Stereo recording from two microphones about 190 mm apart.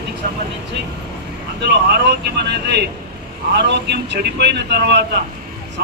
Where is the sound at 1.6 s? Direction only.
60° right (ahead or behind).